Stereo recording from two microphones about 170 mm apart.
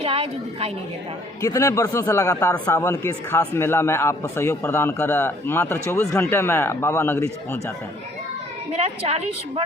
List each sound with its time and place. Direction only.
0.0 s a woman's voice: 35° right (ahead or behind)
1.4 s speech: 20° left (ahead or behind)
8.7 s a woman's voice: 40° right (ahead or behind)